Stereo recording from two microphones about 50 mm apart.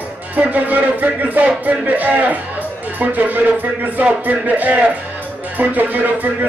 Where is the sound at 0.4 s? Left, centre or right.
Right.